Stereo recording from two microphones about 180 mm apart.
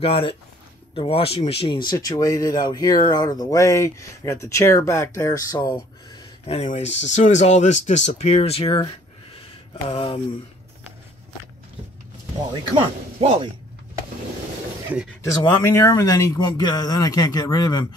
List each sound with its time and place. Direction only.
0.0 s speech: 30° left (ahead or behind)
6.4 s speech: 35° left (ahead or behind)
12.6 s speech: 30° right (ahead or behind)
15.2 s speech: 15° left (ahead or behind)